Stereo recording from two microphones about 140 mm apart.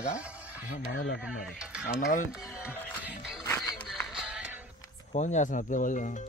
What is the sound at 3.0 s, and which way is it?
Music, 5° right (ahead or behind).